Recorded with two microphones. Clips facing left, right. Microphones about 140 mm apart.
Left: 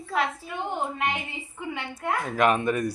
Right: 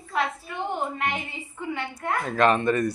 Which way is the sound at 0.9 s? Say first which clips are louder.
Even; 15° left (ahead or behind).